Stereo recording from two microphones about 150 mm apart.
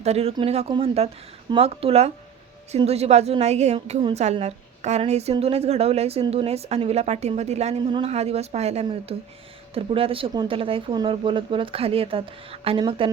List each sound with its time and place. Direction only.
0.0 s a woman's voice: 45° right (ahead or behind)